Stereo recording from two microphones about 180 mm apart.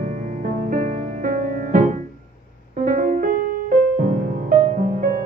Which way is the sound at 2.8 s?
50° right (ahead or behind).